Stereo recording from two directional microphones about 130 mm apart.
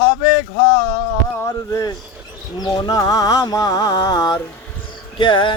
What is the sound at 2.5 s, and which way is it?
Music, 30° left (ahead or behind).